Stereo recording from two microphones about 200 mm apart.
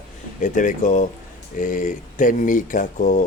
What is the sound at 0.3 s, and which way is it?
Speech, 40° left (ahead or behind).